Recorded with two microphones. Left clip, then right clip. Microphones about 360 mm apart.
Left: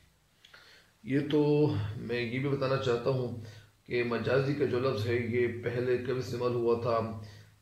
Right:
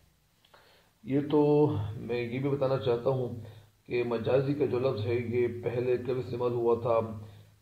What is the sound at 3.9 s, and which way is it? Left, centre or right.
A man's voice, centre.